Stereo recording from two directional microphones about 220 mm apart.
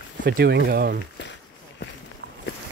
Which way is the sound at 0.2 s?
50° right (ahead or behind).